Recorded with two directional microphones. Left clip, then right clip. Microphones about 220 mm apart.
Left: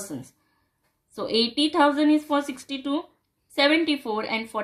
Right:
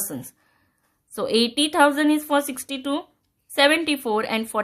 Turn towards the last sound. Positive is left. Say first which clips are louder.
# right 4 dB
turn(degrees=-50)  # may be behind; listen again after turning